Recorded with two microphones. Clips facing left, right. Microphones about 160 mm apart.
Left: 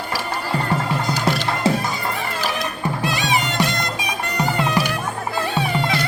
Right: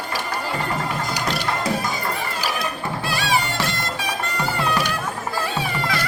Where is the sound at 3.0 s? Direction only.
20° left (ahead or behind).